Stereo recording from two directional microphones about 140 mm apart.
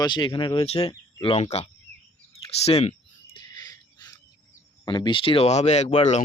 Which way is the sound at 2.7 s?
45° left (ahead or behind).